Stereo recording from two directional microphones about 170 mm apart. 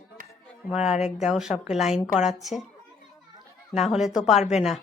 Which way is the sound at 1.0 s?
40° left (ahead or behind).